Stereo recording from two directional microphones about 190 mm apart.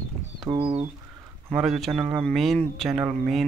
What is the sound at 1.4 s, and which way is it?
Speech, centre (ahead or behind).